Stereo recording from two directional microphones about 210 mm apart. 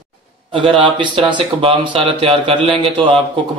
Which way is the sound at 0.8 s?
20° right (ahead or behind).